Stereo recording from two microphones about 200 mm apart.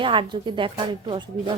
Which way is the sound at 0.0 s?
25° right (ahead or behind).